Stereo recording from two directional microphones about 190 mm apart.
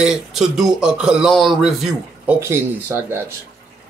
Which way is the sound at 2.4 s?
15° right (ahead or behind).